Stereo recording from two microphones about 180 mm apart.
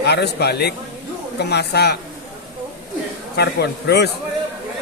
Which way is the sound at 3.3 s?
65° left (ahead or behind).